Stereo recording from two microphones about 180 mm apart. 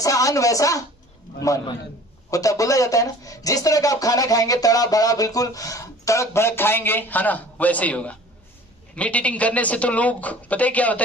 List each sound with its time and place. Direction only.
0.0 s speech: 20° left (ahead or behind)